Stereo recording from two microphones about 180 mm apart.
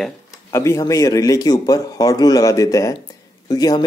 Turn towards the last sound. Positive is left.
turn(degrees=20)  # may be behind; listen again after turning